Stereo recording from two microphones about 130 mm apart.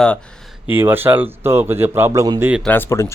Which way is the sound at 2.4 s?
10° right (ahead or behind).